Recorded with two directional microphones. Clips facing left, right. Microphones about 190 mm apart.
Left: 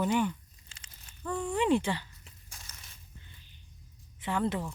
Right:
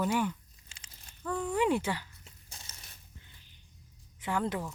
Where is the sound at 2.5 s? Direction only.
20° right (ahead or behind).